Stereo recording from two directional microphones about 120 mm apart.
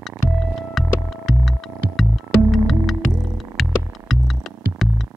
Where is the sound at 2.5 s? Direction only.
Centre (ahead or behind).